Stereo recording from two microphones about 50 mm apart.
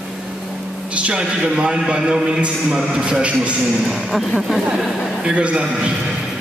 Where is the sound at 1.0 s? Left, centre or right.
Right.